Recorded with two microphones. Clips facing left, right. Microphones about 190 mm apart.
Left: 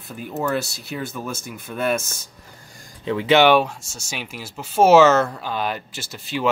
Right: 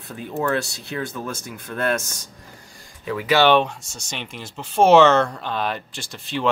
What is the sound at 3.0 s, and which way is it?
Speech, 25° left (ahead or behind).